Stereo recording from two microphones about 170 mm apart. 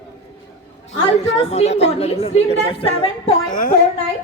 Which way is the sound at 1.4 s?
40° left (ahead or behind).